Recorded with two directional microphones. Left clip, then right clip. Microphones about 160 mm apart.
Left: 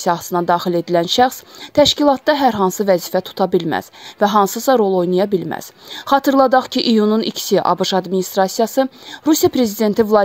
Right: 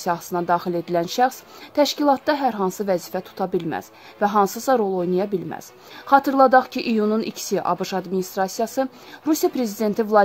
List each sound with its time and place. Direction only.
0.0 s speech: 25° left (ahead or behind)